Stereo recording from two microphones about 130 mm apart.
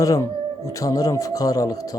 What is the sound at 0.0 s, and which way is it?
Speech, 25° left (ahead or behind).